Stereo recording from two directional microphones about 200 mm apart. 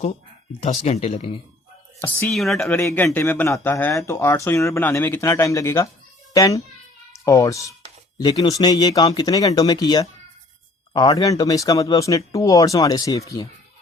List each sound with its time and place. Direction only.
0.6 s speech: 30° left (ahead or behind)
2.0 s a child's voice: 10° left (ahead or behind)